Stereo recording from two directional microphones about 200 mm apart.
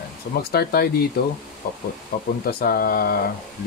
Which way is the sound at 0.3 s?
50° left (ahead or behind).